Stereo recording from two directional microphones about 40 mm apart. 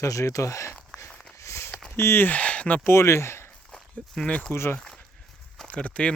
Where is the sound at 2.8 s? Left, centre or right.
Left.